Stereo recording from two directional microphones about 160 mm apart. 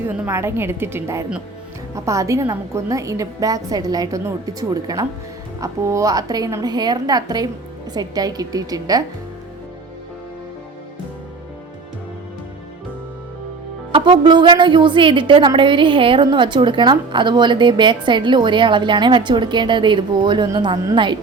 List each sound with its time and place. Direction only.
0.1 s a woman's voice: 15° right (ahead or behind)
13.9 s a woman's voice: 30° right (ahead or behind)